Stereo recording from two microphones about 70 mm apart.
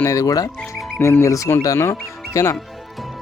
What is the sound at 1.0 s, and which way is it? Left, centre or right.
Speech, left.